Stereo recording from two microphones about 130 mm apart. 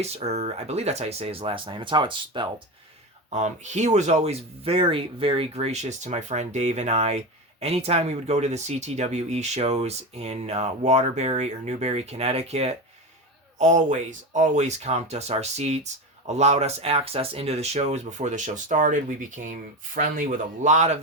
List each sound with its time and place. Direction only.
0.0 s speech: 55° right (ahead or behind); by 2.5 s 35° right (ahead or behind)
3.2 s speech: 65° right (ahead or behind)
13.6 s speech: 70° right (ahead or behind)